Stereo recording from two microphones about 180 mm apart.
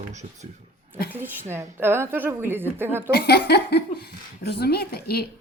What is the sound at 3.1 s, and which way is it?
A woman's voice, 60° left (ahead or behind).